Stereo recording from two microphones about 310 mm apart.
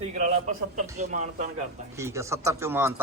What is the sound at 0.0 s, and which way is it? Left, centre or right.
A man's voice, right.